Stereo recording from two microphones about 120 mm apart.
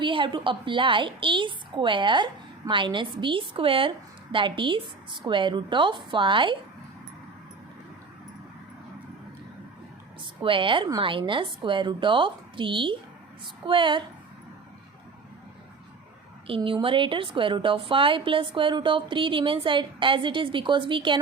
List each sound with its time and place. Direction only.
0.0 s a woman's voice: 45° right (ahead or behind)
10.4 s a woman's voice: 45° right (ahead or behind)
16.6 s a woman's voice: 45° right (ahead or behind)